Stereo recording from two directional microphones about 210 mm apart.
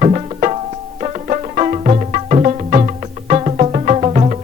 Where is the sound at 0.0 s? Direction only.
30° right (ahead or behind).